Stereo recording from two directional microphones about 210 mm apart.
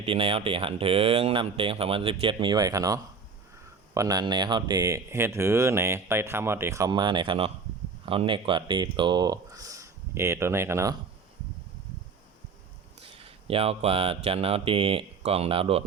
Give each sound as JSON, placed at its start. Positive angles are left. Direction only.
{"t": 0.0, "sound": "speech", "side_deg": -25}
{"t": 13.0, "sound": "speech", "side_deg": -25}